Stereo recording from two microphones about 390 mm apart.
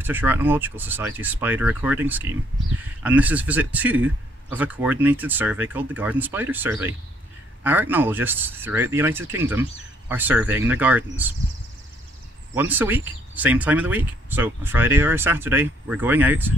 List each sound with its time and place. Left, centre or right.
0.0 s a man's voice: centre
12.5 s a man's voice: centre